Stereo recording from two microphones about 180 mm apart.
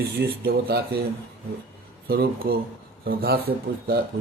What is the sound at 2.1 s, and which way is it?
Speech, 60° right (ahead or behind).